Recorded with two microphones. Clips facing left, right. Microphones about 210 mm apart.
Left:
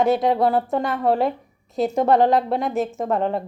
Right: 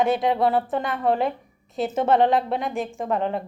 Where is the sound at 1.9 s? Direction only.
40° left (ahead or behind).